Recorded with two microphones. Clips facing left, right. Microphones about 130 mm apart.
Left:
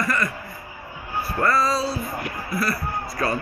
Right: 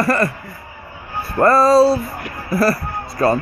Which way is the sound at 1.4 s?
45° right (ahead or behind).